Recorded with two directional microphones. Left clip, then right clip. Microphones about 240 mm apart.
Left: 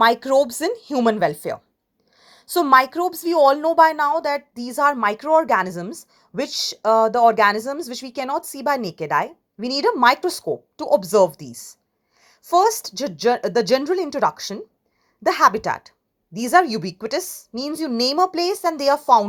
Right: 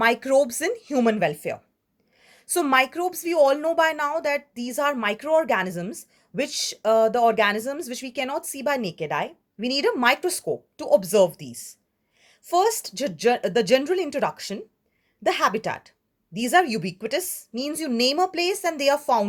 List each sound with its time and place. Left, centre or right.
0.0 s a woman's voice: centre
2.1 s a sound: centre
2.5 s a woman's voice: centre